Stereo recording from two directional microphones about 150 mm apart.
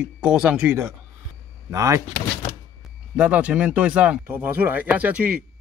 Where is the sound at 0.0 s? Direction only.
5° right (ahead or behind).